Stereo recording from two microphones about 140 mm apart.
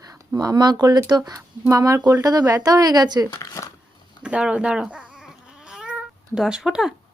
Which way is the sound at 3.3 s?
25° left (ahead or behind).